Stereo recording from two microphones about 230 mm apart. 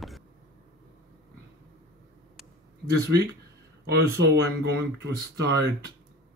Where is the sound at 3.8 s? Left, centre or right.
Right.